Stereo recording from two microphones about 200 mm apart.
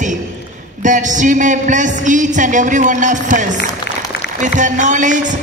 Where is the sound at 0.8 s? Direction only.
40° right (ahead or behind).